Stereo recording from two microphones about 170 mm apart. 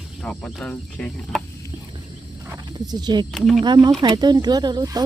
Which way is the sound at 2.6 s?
25° right (ahead or behind).